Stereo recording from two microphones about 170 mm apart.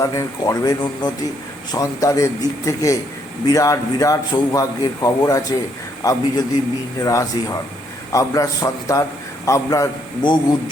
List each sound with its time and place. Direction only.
0.0 s a man's voice: 20° left (ahead or behind)